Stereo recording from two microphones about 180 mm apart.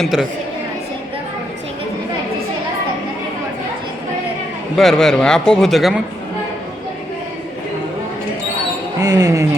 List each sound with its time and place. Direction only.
0.0 s speech: centre (ahead or behind)
4.8 s speech: centre (ahead or behind)
9.0 s speech: 20° right (ahead or behind)